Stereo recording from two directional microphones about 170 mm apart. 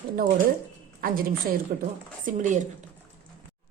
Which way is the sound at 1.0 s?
55° right (ahead or behind).